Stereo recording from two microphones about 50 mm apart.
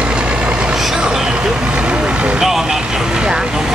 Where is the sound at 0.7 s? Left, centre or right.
Centre.